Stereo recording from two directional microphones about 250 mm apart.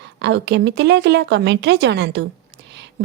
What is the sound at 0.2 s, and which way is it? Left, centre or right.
A woman's voice, right.